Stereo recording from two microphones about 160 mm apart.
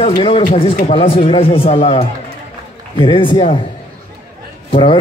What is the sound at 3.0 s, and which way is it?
Speech, 30° left (ahead or behind).